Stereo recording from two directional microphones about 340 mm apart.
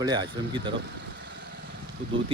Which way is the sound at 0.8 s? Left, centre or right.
Right.